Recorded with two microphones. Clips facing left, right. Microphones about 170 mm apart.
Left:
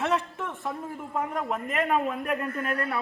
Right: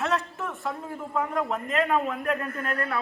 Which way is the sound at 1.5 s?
10° left (ahead or behind).